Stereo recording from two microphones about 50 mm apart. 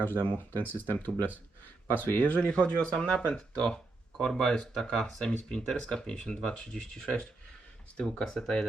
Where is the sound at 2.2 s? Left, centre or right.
Left; by 8.6 s centre.